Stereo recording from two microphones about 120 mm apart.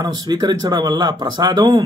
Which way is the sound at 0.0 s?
35° right (ahead or behind).